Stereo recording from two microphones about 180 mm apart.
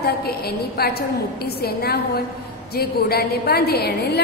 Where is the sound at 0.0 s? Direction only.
60° left (ahead or behind).